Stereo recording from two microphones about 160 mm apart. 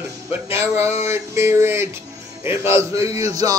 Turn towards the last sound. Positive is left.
turn(degrees=-20)  # may be behind; listen again after turning